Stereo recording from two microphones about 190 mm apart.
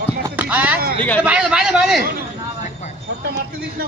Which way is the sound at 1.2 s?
5° right (ahead or behind).